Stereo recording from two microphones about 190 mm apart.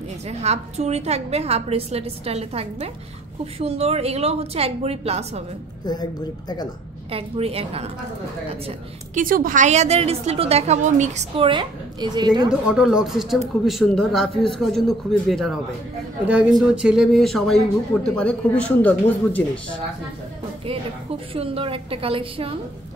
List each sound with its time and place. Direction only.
0.3 s a woman's voice: 35° right (ahead or behind)
7.1 s a woman's voice: 30° right (ahead or behind)
9.2 s a woman's voice: 45° right (ahead or behind); by 12.3 s 25° right (ahead or behind)
12.4 s speech: 5° right (ahead or behind)
20.6 s a woman's voice: 30° right (ahead or behind)